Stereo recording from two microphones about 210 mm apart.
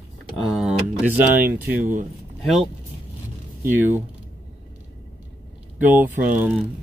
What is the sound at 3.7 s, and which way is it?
Speech, 10° right (ahead or behind).